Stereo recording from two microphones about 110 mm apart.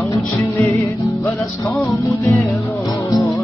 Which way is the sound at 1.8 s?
30° left (ahead or behind).